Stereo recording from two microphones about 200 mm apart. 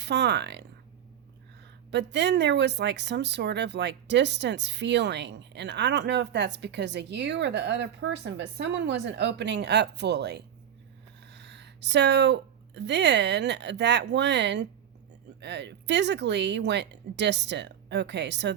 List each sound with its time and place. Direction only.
0.0 s speech: 55° right (ahead or behind)
1.9 s speech: 60° right (ahead or behind)